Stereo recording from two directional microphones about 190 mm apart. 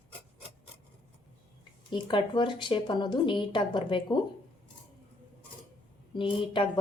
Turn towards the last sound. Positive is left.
turn(degrees=25)  # may be behind; listen again after turning